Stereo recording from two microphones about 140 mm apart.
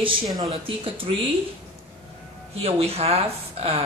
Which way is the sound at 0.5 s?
40° right (ahead or behind).